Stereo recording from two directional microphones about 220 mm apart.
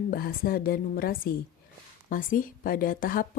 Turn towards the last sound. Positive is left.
turn(degrees=40)  # may be behind; listen again after turning